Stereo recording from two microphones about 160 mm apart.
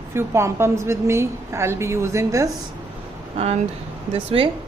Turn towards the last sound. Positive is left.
turn(degrees=-35)  # may be behind; listen again after turning